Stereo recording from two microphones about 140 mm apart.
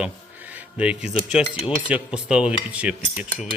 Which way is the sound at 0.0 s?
10° right (ahead or behind).